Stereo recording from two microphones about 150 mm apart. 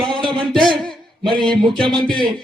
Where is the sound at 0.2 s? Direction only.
35° right (ahead or behind).